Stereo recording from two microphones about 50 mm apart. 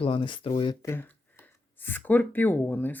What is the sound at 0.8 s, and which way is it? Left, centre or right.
Speech, left.